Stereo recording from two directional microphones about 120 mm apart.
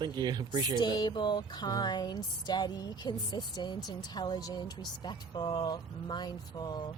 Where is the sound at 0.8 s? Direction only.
35° left (ahead or behind).